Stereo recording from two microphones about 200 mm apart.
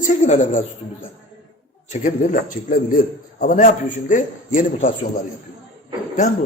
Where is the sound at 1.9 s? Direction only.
40° left (ahead or behind).